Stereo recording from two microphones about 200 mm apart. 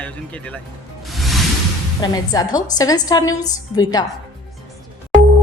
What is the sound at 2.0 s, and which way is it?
A woman's voice, 20° left (ahead or behind).